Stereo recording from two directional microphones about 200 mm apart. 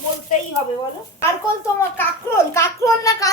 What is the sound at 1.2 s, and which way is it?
A child's voice, 15° left (ahead or behind).